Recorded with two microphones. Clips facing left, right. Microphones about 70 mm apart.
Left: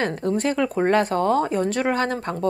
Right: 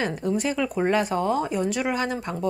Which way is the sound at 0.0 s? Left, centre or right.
Left.